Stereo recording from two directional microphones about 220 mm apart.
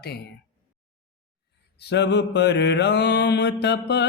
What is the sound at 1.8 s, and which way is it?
Mantra, 50° left (ahead or behind).